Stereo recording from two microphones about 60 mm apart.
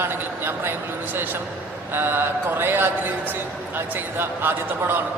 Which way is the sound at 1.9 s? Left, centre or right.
Right.